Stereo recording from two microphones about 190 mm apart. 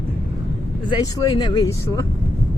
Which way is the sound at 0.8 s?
20° left (ahead or behind).